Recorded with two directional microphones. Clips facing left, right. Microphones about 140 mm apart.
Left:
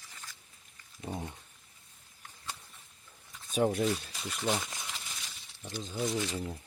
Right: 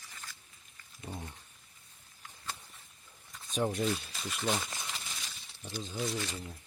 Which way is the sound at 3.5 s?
5° left (ahead or behind).